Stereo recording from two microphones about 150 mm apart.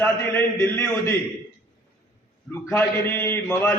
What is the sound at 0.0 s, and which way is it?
A man's voice, 15° left (ahead or behind).